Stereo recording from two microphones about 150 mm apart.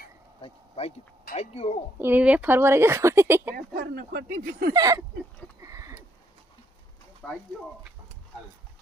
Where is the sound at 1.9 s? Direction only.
15° right (ahead or behind).